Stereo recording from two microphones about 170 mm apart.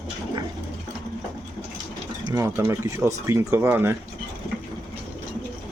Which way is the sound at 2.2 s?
20° right (ahead or behind).